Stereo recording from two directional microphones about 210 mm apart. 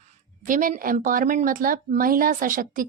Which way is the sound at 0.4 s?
40° right (ahead or behind).